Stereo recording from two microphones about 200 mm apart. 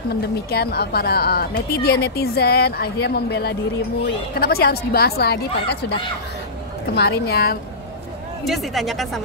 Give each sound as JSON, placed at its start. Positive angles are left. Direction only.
{"t": 0.1, "sound": "a woman's voice", "side_deg": 50}
{"t": 8.5, "sound": "speech", "side_deg": 0}